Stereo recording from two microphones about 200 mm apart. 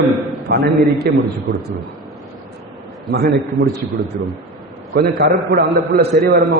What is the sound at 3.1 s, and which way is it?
Speech, 55° right (ahead or behind).